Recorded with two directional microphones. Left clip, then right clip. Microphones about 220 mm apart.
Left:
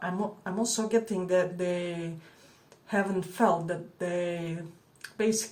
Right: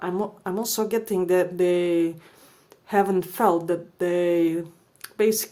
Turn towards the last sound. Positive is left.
turn(degrees=-50)  # may be behind; listen again after turning